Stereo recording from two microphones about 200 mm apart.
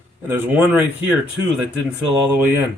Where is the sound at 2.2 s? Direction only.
10° right (ahead or behind).